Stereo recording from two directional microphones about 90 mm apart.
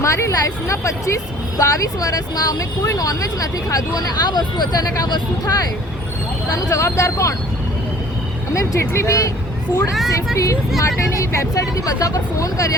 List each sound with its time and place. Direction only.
0.0 s speech: 35° left (ahead or behind)
6.6 s speech: 35° left (ahead or behind)
8.5 s speech: 35° left (ahead or behind)
10.3 s speech: 35° left (ahead or behind)